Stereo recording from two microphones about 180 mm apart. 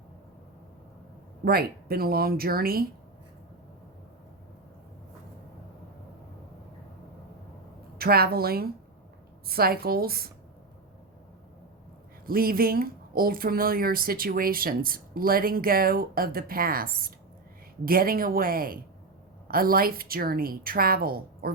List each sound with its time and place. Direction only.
1.5 s speech: 55° right (ahead or behind)
7.9 s speech: 60° right (ahead or behind)
12.2 s speech: 55° right (ahead or behind)